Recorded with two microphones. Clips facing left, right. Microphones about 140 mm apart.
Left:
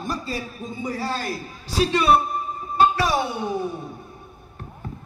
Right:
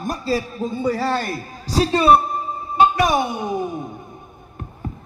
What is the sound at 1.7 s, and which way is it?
Speech, 35° right (ahead or behind).